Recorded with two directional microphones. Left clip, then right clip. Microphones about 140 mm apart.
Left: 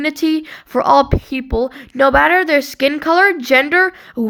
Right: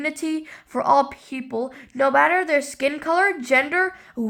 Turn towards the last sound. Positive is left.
turn(degrees=30)  # may be behind; listen again after turning